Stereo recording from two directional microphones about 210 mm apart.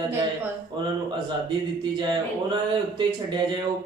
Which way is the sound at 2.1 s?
20° right (ahead or behind).